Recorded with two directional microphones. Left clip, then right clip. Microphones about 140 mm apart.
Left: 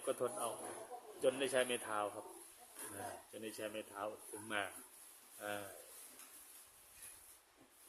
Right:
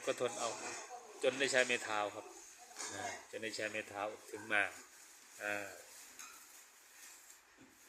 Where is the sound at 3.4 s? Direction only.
10° left (ahead or behind).